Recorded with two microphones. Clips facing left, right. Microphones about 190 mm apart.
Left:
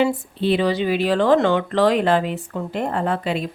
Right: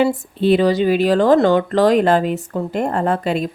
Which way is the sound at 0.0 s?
45° right (ahead or behind).